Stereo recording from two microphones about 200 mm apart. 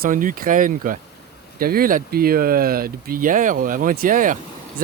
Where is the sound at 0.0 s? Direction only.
45° right (ahead or behind).